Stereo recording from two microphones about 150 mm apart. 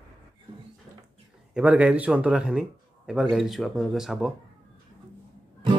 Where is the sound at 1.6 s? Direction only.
10° right (ahead or behind).